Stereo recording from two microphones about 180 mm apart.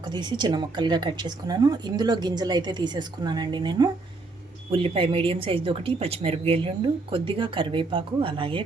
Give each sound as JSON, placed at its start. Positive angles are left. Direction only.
{"t": 0.0, "sound": "speech", "side_deg": -25}